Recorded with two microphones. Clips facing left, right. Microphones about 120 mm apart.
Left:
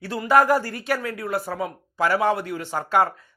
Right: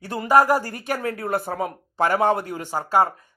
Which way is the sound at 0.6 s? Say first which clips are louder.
Even; 50° right (ahead or behind).